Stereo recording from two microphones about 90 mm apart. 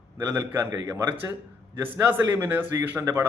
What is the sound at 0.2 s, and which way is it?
Speech, 35° right (ahead or behind).